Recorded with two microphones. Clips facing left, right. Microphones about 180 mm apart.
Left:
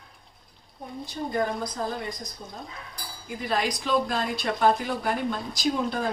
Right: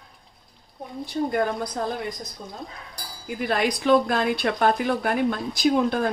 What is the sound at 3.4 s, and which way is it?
Speech, 60° right (ahead or behind).